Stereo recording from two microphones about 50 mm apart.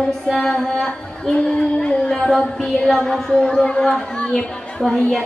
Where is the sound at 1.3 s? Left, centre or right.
Left.